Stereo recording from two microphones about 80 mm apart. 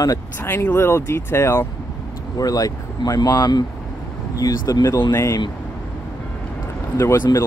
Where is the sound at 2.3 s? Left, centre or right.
Left.